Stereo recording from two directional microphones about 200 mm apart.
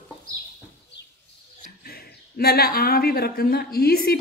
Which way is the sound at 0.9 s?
60° left (ahead or behind).